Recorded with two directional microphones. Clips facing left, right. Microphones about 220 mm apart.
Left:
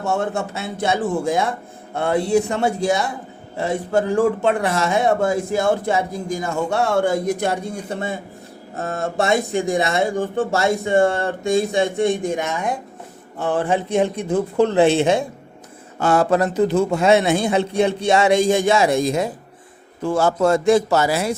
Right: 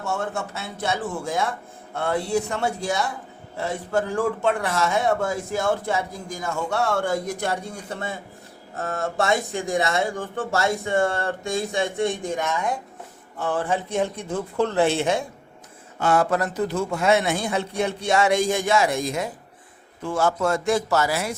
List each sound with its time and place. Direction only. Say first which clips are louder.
0.5 s speech: left 6 dB; 20° left (ahead or behind)
16.0 s a man's voice: left 4 dB; 35° left (ahead or behind)